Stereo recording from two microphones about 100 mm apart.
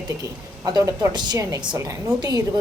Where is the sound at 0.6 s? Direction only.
35° right (ahead or behind).